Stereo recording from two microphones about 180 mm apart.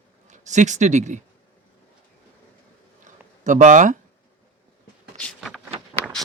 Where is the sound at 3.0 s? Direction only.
45° right (ahead or behind).